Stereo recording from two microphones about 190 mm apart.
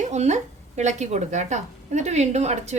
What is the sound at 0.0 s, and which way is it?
A woman's voice, 35° right (ahead or behind).